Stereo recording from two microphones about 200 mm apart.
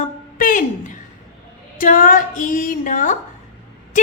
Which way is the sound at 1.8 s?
40° left (ahead or behind).